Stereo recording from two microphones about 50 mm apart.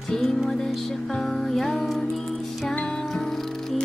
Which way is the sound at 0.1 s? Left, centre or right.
Centre.